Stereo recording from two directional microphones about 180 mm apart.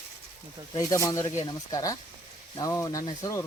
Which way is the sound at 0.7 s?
20° left (ahead or behind).